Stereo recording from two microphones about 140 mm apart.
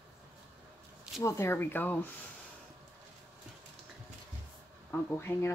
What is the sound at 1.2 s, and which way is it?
Speech, 20° left (ahead or behind).